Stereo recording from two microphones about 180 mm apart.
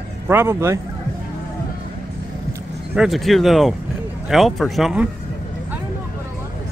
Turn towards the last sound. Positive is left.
turn(degrees=-5)  # may be behind; listen again after turning